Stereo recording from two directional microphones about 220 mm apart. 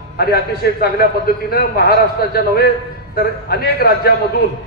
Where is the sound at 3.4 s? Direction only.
45° left (ahead or behind).